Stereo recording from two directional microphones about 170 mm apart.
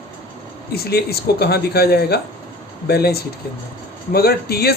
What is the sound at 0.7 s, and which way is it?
Speech, 65° left (ahead or behind).